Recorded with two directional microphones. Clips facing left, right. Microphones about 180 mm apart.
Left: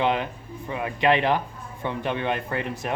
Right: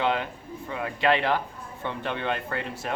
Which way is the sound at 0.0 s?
20° left (ahead or behind).